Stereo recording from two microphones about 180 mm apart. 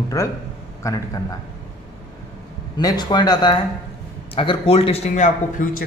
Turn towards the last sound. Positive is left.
turn(degrees=45)  # may be behind; listen again after turning